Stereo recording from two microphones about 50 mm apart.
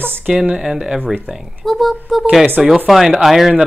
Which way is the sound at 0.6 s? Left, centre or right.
Centre.